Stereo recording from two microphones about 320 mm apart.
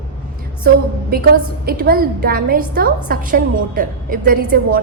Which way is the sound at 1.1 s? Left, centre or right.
Right.